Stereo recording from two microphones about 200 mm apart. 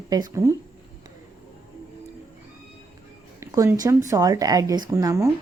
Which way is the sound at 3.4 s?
15° right (ahead or behind).